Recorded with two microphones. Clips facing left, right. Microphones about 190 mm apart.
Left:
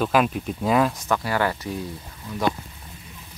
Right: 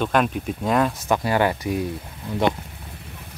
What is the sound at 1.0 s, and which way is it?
Speech, 20° right (ahead or behind).